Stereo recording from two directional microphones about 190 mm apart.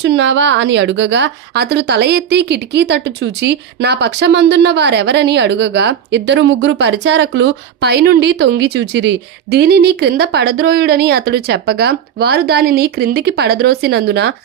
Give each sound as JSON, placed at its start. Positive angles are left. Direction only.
{"t": 0.0, "sound": "a woman's voice", "side_deg": -75}